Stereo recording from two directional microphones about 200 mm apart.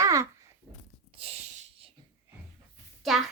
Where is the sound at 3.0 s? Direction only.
Centre (ahead or behind).